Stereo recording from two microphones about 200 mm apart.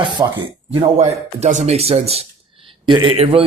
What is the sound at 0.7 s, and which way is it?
Speech, 30° right (ahead or behind).